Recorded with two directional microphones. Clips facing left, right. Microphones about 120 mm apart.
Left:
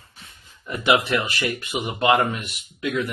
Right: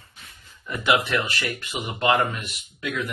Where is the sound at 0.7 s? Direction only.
30° left (ahead or behind).